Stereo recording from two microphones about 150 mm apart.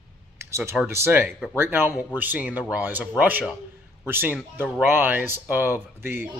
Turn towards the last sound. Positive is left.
turn(degrees=-15)  # may be behind; listen again after turning